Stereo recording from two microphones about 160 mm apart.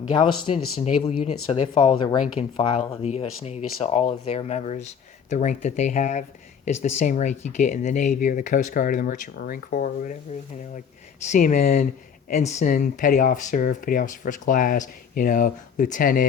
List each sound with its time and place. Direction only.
0.1 s speech: 30° left (ahead or behind); by 10.2 s 55° left (ahead or behind)
11.3 s speech: 55° left (ahead or behind)
12.3 s speech: 45° left (ahead or behind)